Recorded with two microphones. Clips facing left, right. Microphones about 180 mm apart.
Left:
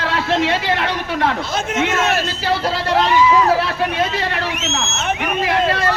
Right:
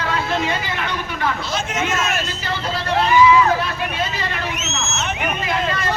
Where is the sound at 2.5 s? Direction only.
80° left.